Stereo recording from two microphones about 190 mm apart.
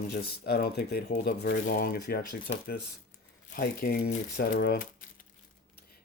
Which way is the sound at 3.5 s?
50° left (ahead or behind).